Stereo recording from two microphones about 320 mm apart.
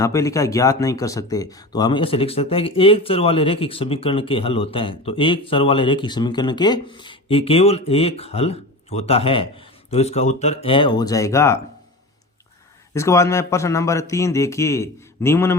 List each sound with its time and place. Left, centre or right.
0.0 s speech: centre
12.9 s speech: centre